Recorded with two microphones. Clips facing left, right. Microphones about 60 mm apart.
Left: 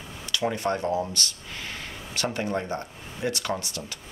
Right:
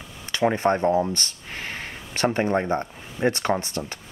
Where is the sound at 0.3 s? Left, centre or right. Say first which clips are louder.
Right 6 dB; right.